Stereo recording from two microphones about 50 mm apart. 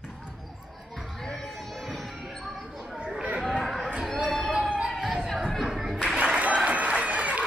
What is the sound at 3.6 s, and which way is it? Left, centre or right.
Chatter, centre.